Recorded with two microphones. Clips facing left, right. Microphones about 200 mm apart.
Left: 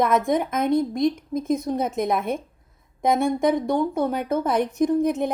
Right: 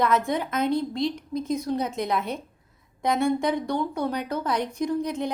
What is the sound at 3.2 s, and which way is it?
Speech, 50° left (ahead or behind).